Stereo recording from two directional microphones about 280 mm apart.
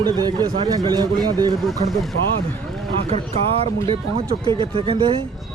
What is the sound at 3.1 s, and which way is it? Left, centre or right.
Speech, right.